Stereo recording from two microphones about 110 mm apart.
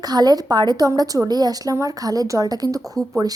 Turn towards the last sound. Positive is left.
turn(degrees=-30)  # may be behind; listen again after turning